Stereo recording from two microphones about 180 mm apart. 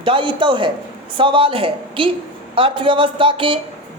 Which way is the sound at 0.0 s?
30° right (ahead or behind).